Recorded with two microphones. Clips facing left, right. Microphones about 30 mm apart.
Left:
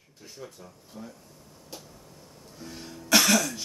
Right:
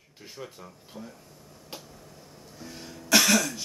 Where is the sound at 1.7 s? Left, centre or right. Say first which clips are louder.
Right 2 dB; right.